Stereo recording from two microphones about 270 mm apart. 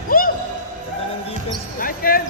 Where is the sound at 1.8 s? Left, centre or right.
Left.